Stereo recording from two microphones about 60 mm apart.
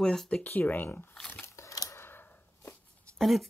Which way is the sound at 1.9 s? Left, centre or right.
Left.